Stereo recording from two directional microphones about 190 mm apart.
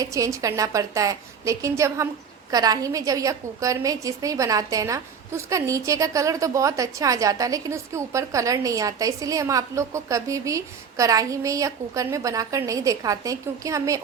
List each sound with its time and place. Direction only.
0.0 s a woman's voice: 15° right (ahead or behind)